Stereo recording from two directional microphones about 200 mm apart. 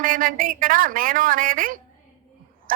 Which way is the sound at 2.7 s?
45° right (ahead or behind).